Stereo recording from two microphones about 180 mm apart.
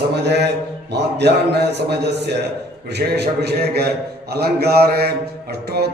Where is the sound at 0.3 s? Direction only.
70° right (ahead or behind).